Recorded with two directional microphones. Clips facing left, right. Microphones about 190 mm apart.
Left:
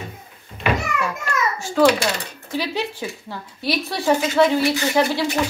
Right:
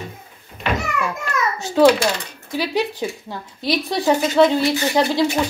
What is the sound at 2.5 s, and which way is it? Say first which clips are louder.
A woman's voice: right 3 dB; 15° right (ahead or behind).